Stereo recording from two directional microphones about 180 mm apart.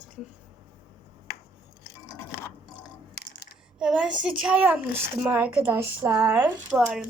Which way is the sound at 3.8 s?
5° right (ahead or behind).